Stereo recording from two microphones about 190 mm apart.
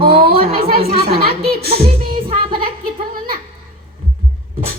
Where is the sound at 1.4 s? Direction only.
55° right (ahead or behind).